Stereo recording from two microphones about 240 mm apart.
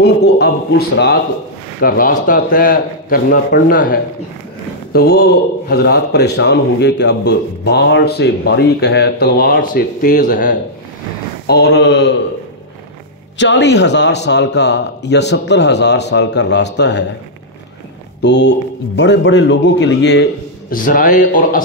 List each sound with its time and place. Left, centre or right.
0.0 s a sound: left
1.8 s a man's voice: left
11.4 s a man's voice: left
13.4 s a man's voice: left
18.2 s a man's voice: left
20.7 s a man's voice: left